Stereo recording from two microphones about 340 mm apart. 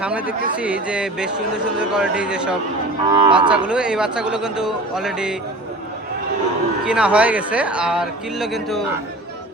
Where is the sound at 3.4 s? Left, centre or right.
Centre.